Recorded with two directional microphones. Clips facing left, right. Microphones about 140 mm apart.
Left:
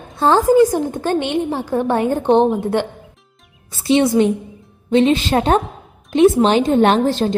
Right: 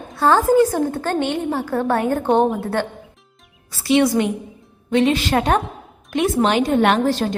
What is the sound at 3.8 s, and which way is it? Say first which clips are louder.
A woman's voice: left 2 dB; 25° left (ahead or behind).